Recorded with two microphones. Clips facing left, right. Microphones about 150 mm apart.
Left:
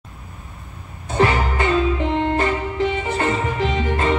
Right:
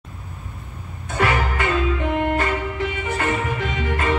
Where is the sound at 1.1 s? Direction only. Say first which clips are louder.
Left 3 dB; 30° left (ahead or behind).